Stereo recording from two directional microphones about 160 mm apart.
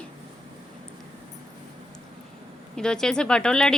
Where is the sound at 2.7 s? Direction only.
5° left (ahead or behind).